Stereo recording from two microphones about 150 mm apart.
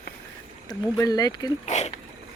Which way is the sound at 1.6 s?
50° left (ahead or behind).